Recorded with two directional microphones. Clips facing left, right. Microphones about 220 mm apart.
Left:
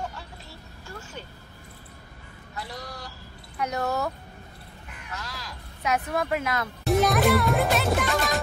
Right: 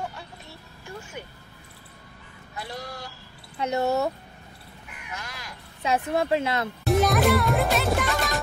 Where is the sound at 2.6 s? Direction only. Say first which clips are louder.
Right 2 dB; 25° right (ahead or behind).